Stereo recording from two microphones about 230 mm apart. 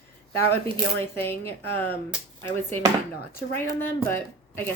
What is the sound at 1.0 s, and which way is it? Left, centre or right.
Speech, centre.